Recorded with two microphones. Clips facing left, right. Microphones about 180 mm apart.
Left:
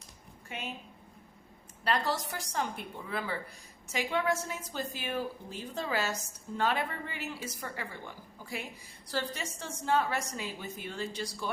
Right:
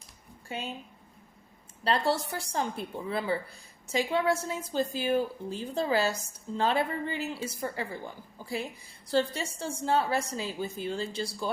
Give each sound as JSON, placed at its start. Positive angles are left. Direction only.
{"t": 0.4, "sound": "speech", "side_deg": -30}
{"t": 1.8, "sound": "a woman's voice", "side_deg": -30}